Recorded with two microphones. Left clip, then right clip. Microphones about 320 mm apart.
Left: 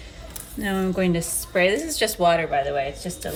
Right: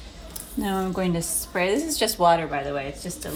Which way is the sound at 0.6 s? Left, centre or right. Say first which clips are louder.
Left 2 dB; centre.